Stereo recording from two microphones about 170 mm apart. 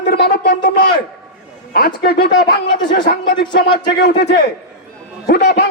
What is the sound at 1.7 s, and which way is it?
Speech, 65° left (ahead or behind).